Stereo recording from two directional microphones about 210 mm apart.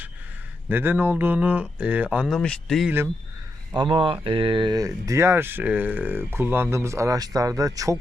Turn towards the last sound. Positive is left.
turn(degrees=-15)  # may be behind; listen again after turning